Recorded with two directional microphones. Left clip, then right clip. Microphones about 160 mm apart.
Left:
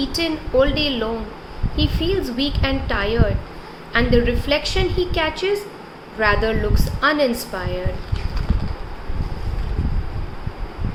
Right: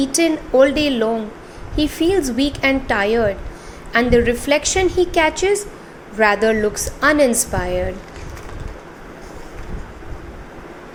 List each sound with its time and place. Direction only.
0.0 s speech: 45° right (ahead or behind)